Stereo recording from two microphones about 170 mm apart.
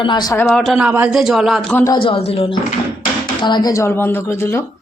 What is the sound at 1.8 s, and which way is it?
A woman's voice, 25° left (ahead or behind).